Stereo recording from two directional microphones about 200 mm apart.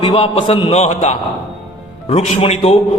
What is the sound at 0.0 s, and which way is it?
A man's voice, 25° left (ahead or behind).